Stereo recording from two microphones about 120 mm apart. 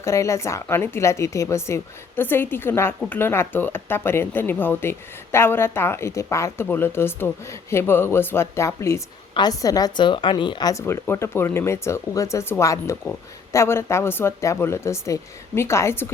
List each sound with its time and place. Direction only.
0.0 s speech: 25° left (ahead or behind)
9.3 s speech: 35° left (ahead or behind)